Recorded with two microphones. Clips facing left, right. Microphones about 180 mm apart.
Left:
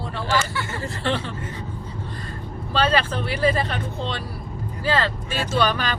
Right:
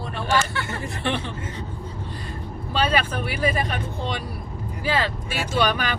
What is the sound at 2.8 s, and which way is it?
Speech, 10° right (ahead or behind).